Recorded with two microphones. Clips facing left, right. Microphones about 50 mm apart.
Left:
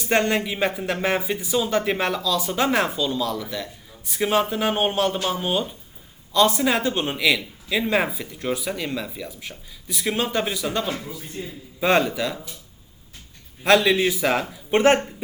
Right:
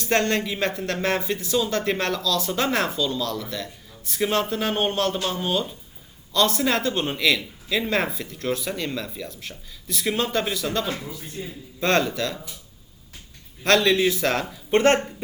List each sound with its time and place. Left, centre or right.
0.0 s speech: centre
11.4 s a man's voice: centre
11.8 s speech: centre
13.7 s speech: centre